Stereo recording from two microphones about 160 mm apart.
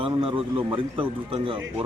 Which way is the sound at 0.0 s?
35° right (ahead or behind).